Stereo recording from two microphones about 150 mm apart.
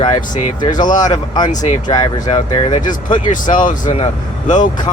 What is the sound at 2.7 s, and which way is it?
Speech, 60° left (ahead or behind).